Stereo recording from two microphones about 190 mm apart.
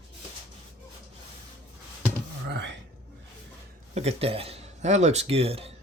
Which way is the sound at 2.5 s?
65° right (ahead or behind).